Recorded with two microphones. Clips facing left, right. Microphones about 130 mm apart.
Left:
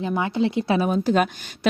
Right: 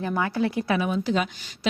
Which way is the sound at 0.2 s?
20° left (ahead or behind).